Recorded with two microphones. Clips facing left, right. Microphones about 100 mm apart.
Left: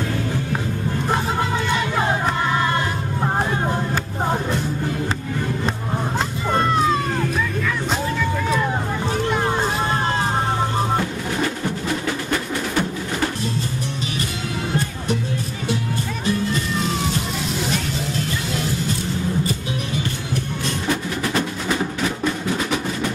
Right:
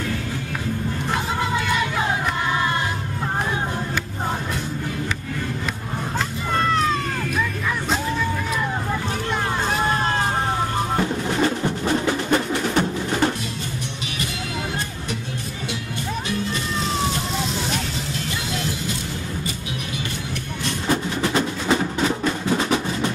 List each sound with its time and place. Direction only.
6.1 s a sound: 25° left (ahead or behind)
12.3 s music: 25° right (ahead or behind)
21.2 s percussion: 25° right (ahead or behind)